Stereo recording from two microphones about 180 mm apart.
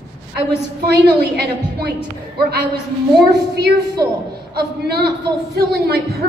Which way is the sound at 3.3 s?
70° right (ahead or behind).